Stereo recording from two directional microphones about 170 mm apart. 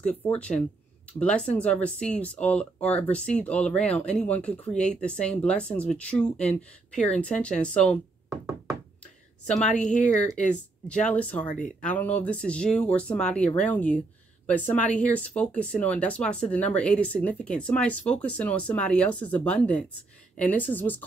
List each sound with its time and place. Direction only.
0.0 s speech: 10° left (ahead or behind)
9.8 s speech: 45° left (ahead or behind)
10.2 s a woman's voice: 5° left (ahead or behind)